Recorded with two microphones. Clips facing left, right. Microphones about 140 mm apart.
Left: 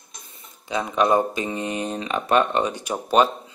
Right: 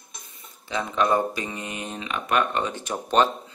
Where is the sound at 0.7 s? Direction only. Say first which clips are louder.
Left 3 dB; 15° left (ahead or behind); by 2.4 s 35° left (ahead or behind).